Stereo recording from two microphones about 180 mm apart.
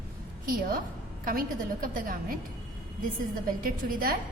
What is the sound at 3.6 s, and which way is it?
Speech, 50° right (ahead or behind).